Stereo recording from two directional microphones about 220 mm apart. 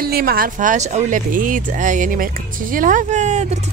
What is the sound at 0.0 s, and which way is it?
Speech, 45° right (ahead or behind).